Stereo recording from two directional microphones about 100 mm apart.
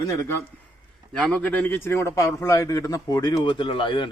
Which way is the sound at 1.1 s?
10° left (ahead or behind).